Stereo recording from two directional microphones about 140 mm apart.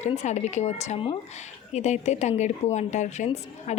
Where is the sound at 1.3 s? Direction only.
55° left (ahead or behind).